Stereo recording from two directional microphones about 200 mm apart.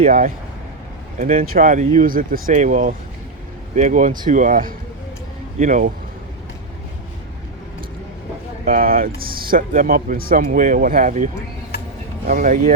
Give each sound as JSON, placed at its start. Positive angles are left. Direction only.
{"t": 0.0, "sound": "speech", "side_deg": -45}
{"t": 8.6, "sound": "speech", "side_deg": -45}
{"t": 12.3, "sound": "speech", "side_deg": -40}